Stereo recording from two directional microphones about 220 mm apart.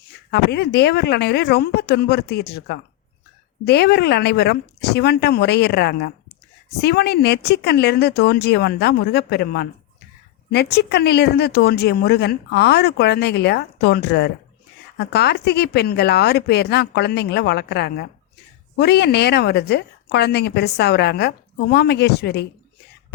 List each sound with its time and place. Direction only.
0.1 s speech: 50° left (ahead or behind)